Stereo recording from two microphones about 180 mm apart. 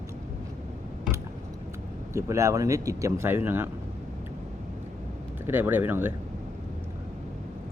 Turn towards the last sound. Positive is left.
turn(degrees=-10)  # may be behind; listen again after turning